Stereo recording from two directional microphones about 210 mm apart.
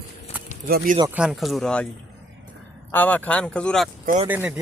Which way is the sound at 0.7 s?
45° right (ahead or behind).